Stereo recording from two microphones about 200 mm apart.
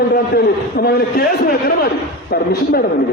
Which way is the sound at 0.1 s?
50° left (ahead or behind).